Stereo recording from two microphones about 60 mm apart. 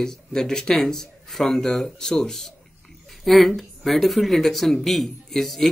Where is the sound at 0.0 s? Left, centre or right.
Centre.